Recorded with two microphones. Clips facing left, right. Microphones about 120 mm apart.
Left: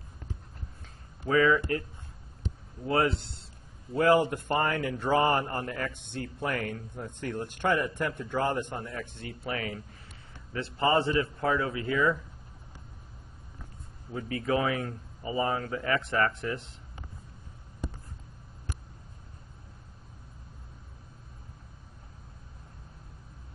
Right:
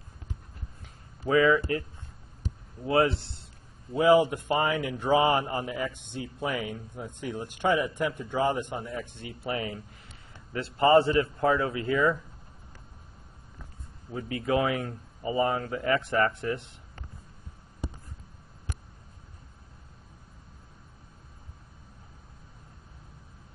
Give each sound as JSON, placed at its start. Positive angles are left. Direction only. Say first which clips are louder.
{"t": 1.2, "sound": "speech", "louder": "right 2 dB", "side_deg": -25}
{"t": 2.9, "sound": "speech", "louder": "right 3 dB", "side_deg": -25}
{"t": 3.9, "sound": "speech", "louder": "right 2 dB", "side_deg": -5}
{"t": 9.5, "sound": "speech", "louder": "right 2 dB", "side_deg": -25}
{"t": 11.1, "sound": "speech", "louder": "right 3 dB", "side_deg": -25}
{"t": 14.1, "sound": "speech", "louder": "right 2 dB", "side_deg": -25}